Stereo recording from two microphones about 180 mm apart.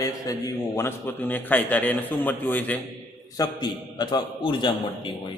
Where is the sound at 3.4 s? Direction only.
25° left (ahead or behind).